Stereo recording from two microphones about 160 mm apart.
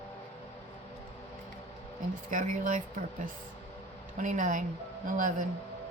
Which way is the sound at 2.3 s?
55° right (ahead or behind).